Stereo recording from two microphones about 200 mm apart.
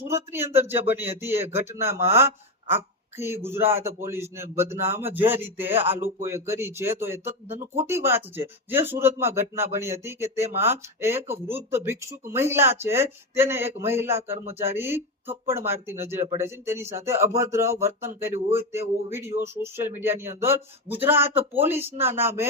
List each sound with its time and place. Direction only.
0.1 s speech: 10° right (ahead or behind)
7.3 s speech: 30° right (ahead or behind)
7.6 s speech: 10° right (ahead or behind)
18.3 s speech: 35° right (ahead or behind)
18.5 s speech: 15° right (ahead or behind)